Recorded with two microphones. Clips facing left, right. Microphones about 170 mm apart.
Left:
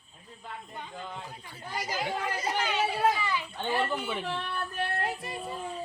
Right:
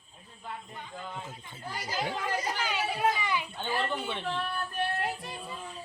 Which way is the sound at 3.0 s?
15° right (ahead or behind).